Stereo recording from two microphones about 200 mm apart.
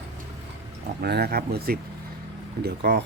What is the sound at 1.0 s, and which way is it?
Speech, 55° right (ahead or behind).